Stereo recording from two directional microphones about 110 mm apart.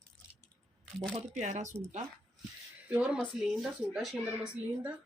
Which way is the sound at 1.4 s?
90° right.